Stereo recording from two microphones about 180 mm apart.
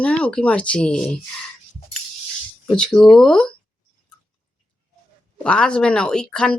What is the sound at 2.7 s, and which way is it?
Speech, 5° left (ahead or behind).